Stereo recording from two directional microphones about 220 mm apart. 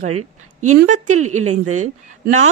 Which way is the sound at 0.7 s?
35° right (ahead or behind).